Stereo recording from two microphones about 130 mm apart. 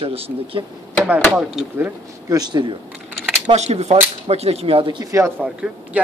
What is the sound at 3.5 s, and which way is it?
A woman's voice, 55° right (ahead or behind).